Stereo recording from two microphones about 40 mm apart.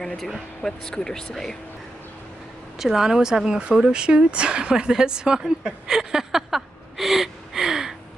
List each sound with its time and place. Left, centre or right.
0.6 s speech: centre
2.8 s speech: centre